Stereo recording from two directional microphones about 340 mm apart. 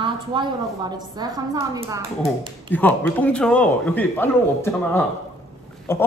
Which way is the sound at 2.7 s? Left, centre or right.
Centre.